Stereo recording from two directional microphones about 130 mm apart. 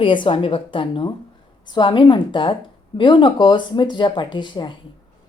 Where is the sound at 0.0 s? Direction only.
40° left (ahead or behind).